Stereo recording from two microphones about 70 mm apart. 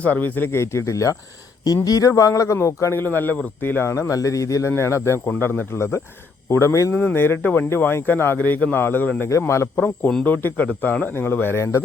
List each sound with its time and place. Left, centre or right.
0.0 s speech: left
1.6 s a man's voice: left
3.0 s a man's voice: left
5.2 s a man's voice: left
6.9 s a man's voice: left
9.7 s speech: left